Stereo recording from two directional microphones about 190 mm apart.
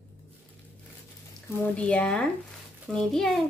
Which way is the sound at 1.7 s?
5° left (ahead or behind).